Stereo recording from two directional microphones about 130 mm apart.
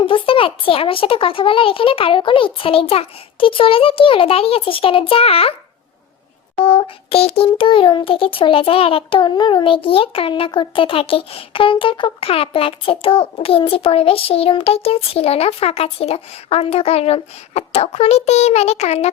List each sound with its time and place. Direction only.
0.0 s a child's voice: 40° left (ahead or behind)
6.6 s a child's voice: 45° left (ahead or behind)